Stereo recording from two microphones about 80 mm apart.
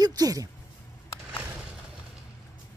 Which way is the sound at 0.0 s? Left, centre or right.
Right.